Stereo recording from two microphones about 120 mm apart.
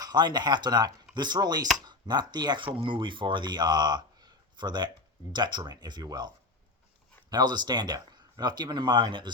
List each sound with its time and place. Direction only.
0.0 s speech: 35° right (ahead or behind)